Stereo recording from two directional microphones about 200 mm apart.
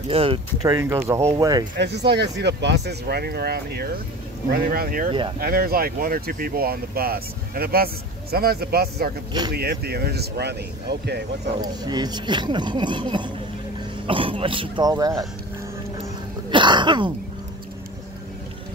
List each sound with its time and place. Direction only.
0.1 s speech: 25° right (ahead or behind)
1.8 s speech: 60° right (ahead or behind)
11.6 s speech: 20° right (ahead or behind)
16.4 s speech: 25° right (ahead or behind)